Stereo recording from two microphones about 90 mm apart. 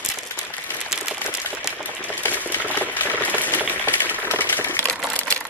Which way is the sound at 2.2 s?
20° left (ahead or behind).